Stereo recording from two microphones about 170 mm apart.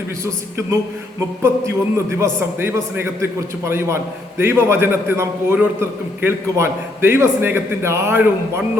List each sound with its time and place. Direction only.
1.4 s a man's voice: 15° right (ahead or behind)